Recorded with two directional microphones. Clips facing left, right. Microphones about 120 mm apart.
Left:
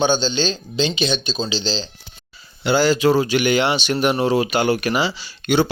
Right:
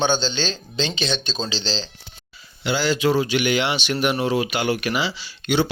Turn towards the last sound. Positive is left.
turn(degrees=45)  # may be behind; listen again after turning